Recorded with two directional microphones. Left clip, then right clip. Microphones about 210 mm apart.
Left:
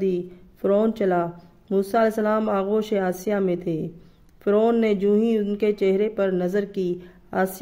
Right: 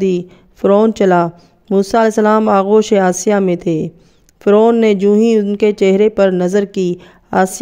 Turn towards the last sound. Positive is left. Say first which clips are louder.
# right 10 dB
turn(degrees=-45)  # may be behind; listen again after turning